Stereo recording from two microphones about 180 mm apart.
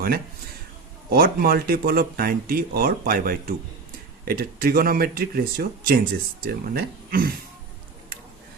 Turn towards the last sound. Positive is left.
turn(degrees=-55)  # may be behind; listen again after turning